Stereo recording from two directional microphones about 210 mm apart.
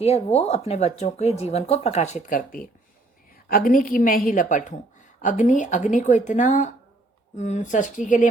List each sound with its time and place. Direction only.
0.0 s speech: 30° left (ahead or behind)